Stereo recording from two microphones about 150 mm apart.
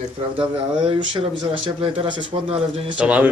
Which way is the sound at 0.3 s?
35° right (ahead or behind).